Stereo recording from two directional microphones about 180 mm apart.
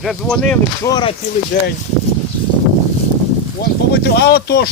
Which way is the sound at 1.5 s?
45° left (ahead or behind).